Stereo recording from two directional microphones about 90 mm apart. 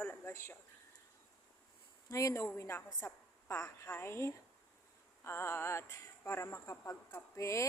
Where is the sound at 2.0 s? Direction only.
35° left (ahead or behind).